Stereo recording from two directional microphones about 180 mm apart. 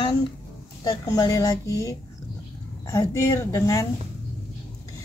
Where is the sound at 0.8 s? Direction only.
20° left (ahead or behind).